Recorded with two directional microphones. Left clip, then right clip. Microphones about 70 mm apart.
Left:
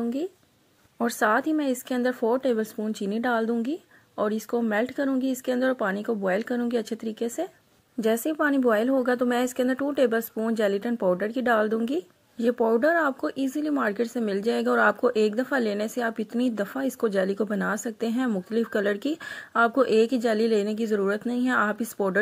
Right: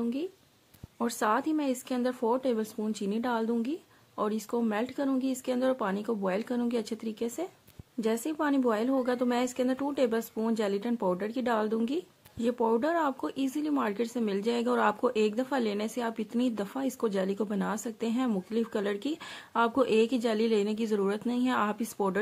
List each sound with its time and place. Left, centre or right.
0.9 s a woman's voice: left
12.4 s a woman's voice: left